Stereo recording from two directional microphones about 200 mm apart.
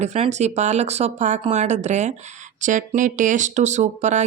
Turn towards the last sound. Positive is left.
turn(degrees=-35)  # may be behind; listen again after turning